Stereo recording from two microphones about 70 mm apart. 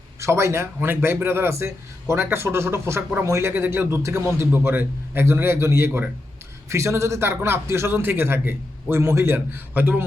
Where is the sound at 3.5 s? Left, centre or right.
Right.